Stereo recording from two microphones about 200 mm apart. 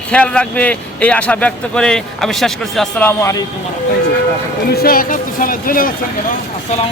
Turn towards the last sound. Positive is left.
turn(degrees=45)  # may be behind; listen again after turning